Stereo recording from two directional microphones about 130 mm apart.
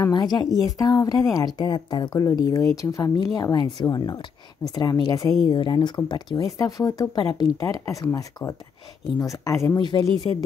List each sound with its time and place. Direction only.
0.0 s a woman's voice: 30° left (ahead or behind)
9.8 s speech: 35° left (ahead or behind)